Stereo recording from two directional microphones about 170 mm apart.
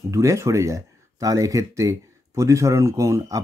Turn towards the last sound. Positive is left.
turn(degrees=-20)  # may be behind; listen again after turning